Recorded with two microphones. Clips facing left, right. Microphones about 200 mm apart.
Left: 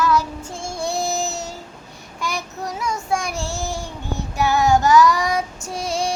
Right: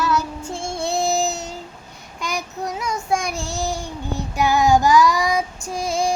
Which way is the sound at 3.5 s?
15° right (ahead or behind).